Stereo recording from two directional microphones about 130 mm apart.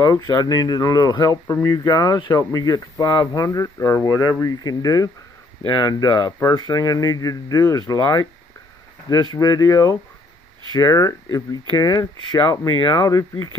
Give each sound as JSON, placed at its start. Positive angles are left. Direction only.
{"t": 0.0, "sound": "speech", "side_deg": 30}